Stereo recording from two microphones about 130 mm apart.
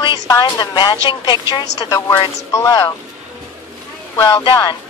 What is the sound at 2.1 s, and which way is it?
Speech, 20° left (ahead or behind).